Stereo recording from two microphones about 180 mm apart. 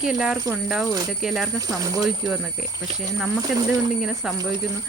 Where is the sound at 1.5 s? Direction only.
20° right (ahead or behind).